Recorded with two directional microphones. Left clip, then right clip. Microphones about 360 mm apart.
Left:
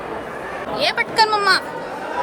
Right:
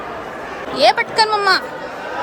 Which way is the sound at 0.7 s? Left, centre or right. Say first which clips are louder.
Right 4 dB; centre.